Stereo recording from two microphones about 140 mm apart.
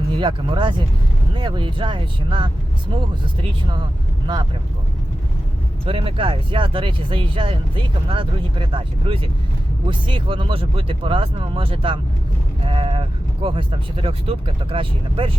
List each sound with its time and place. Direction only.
0.1 s speech: 35° right (ahead or behind)
5.8 s speech: 40° right (ahead or behind)